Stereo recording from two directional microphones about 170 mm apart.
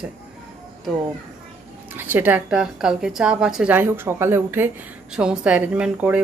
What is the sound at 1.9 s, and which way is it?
Speech, 10° right (ahead or behind).